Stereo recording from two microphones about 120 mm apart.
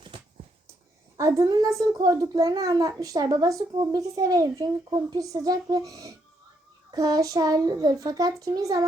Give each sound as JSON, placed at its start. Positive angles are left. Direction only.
{"t": 1.1, "sound": "a woman's voice", "side_deg": -25}